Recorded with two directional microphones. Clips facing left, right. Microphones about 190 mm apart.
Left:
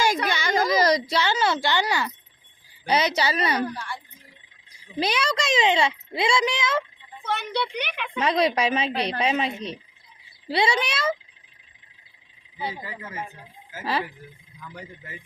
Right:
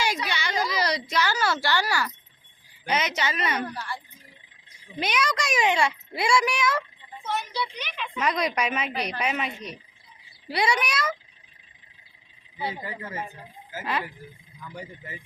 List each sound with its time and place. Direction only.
0.0 s a sound: 45° left (ahead or behind)
1.1 s a child's voice: 25° left (ahead or behind)
2.8 s a woman's voice: 35° left (ahead or behind)
3.6 s speech: centre (ahead or behind)
4.9 s a child's voice: 30° left (ahead or behind)
7.3 s a woman's voice: 60° left (ahead or behind)
8.2 s a child's voice: 30° left (ahead or behind)